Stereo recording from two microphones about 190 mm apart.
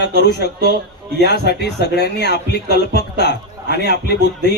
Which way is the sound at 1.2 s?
60° left (ahead or behind).